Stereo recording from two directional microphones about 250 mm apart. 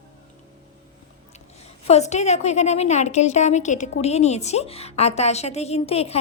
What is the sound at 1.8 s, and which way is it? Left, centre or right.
A woman's voice, left.